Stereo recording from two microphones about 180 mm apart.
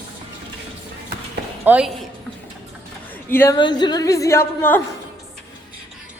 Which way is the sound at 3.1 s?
10° left (ahead or behind).